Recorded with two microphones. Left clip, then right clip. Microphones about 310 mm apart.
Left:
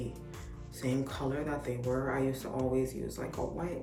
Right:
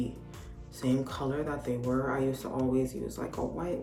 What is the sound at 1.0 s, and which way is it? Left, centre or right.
Speech, centre.